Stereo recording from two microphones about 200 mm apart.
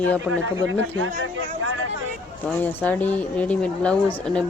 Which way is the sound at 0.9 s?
80° right.